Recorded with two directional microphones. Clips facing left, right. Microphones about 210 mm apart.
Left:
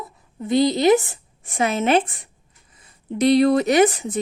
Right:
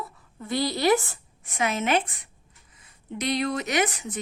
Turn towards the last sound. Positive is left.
turn(degrees=30)  # may be behind; listen again after turning